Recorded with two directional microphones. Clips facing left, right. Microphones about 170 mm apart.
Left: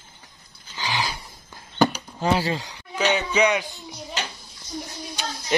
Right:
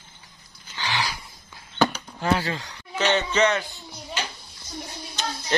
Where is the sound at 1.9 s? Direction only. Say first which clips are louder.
Left 1 dB; 15° left (ahead or behind).